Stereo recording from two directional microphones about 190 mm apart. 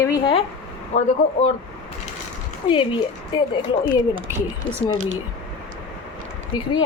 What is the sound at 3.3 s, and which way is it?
Speech, 25° left (ahead or behind).